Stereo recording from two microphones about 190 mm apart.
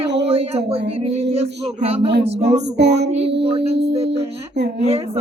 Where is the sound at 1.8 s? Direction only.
30° right (ahead or behind).